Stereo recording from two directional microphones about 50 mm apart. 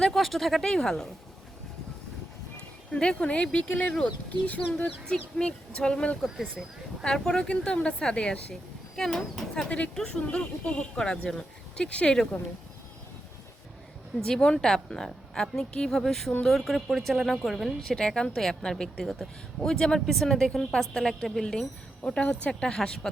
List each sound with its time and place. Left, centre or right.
0.0 s a woman's voice: centre
2.9 s a woman's voice: left
9.2 s speech: centre
9.6 s speech: left
14.3 s a woman's voice: centre
17.8 s a woman's voice: centre